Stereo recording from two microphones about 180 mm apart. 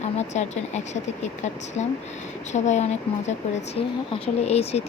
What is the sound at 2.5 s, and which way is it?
Speech, 40° left (ahead or behind).